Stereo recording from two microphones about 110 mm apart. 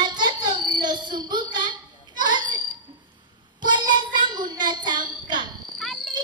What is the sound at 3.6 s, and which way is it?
Child singing, 45° right (ahead or behind).